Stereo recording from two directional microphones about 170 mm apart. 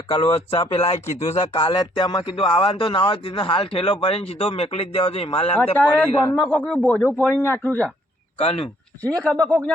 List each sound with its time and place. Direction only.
0.1 s speech: 30° left (ahead or behind)
5.7 s speech: 10° left (ahead or behind)
8.4 s speech: 35° left (ahead or behind)
9.0 s speech: 5° left (ahead or behind)